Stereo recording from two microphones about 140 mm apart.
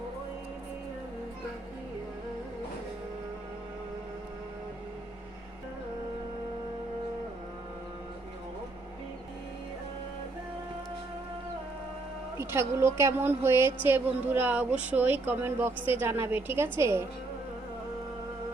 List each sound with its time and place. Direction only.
12.4 s a woman's voice: 20° right (ahead or behind)